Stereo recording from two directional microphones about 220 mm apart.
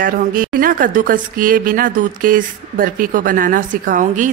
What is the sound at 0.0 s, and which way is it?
A woman's voice, 40° right (ahead or behind).